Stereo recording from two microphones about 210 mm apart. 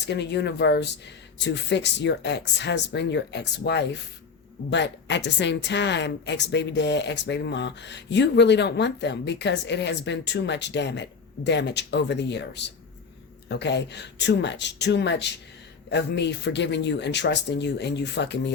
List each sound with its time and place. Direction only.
0.1 s a woman's voice: 55° left (ahead or behind)